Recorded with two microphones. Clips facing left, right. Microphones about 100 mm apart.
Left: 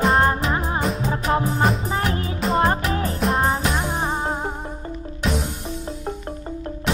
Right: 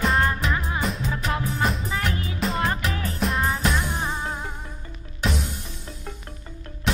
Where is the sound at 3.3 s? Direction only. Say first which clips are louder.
Left 3 dB; 35° left (ahead or behind).